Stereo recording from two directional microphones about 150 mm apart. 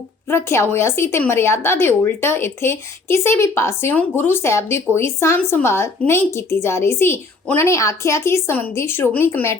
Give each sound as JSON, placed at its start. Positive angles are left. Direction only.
{"t": 0.3, "sound": "speech", "side_deg": 15}